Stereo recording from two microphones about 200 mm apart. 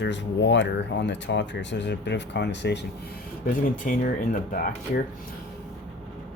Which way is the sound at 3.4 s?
40° left (ahead or behind).